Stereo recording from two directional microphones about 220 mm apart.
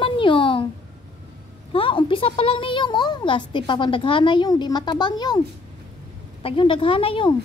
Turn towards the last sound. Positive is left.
turn(degrees=25)  # may be behind; listen again after turning